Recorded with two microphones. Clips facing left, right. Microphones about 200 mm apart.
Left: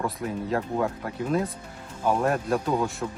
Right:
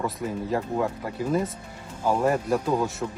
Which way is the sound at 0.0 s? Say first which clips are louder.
Even; centre (ahead or behind).